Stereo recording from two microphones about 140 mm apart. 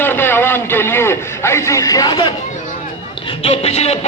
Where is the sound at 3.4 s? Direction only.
45° left (ahead or behind).